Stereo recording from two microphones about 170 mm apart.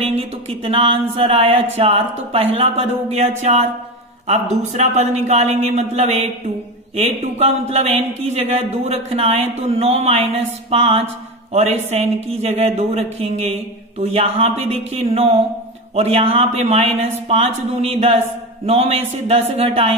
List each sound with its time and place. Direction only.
0.0 s a man's voice: 35° right (ahead or behind)